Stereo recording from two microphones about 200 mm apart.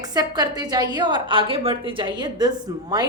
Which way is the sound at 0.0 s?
20° right (ahead or behind).